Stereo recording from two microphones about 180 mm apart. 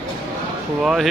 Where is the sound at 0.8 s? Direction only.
Centre (ahead or behind).